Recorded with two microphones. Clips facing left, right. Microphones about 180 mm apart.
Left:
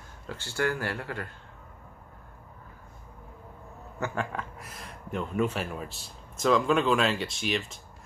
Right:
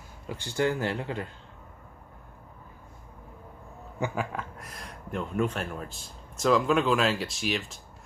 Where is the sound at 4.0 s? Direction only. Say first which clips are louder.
Right 1 dB; 5° right (ahead or behind).